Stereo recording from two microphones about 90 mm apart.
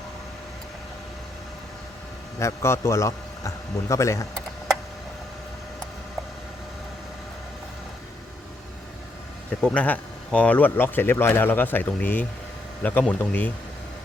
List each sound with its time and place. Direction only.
2.4 s a man's voice: 30° left (ahead or behind)
9.7 s speech: 15° left (ahead or behind)